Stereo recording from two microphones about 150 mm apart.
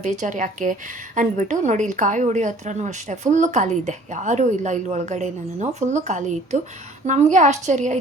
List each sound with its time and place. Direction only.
0.0 s a woman's voice: 55° right (ahead or behind)